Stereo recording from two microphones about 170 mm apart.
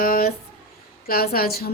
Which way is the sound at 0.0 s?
60° left (ahead or behind).